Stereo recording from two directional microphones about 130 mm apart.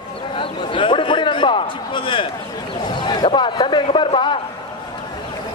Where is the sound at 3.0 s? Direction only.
40° left (ahead or behind).